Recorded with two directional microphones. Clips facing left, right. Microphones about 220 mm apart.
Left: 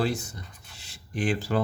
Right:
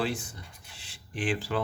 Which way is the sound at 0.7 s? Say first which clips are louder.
Left 5 dB; 40° left (ahead or behind).